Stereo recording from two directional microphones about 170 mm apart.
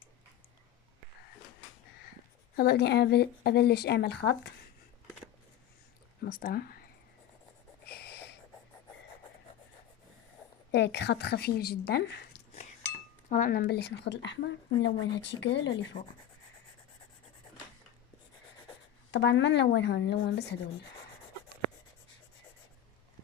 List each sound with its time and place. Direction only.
2.5 s speech: 65° left (ahead or behind)
6.2 s speech: 60° left (ahead or behind)
7.8 s a sound: 70° left (ahead or behind)
10.7 s speech: 90° left
13.3 s a woman's voice: 55° left (ahead or behind); by 15.9 s 90° left
19.1 s a woman's voice: 90° left